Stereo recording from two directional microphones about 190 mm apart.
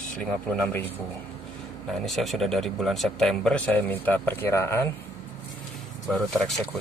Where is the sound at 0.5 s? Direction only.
10° left (ahead or behind).